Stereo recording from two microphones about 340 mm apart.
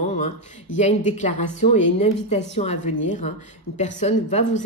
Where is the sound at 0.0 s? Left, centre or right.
Centre.